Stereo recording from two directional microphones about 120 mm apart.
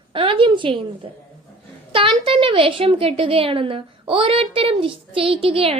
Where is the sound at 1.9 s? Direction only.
45° right (ahead or behind).